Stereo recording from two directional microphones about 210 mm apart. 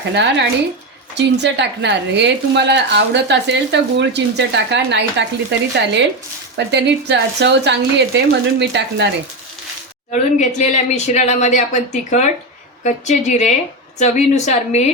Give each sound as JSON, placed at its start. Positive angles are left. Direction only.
{"t": 0.1, "sound": "a woman's voice", "side_deg": -55}
{"t": 10.1, "sound": "a woman's voice", "side_deg": 35}